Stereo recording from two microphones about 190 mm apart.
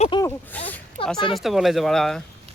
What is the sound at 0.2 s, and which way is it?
Speech, 10° left (ahead or behind).